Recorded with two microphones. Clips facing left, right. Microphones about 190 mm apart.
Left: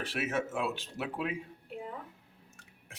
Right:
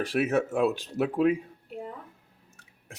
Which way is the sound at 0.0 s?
40° right (ahead or behind).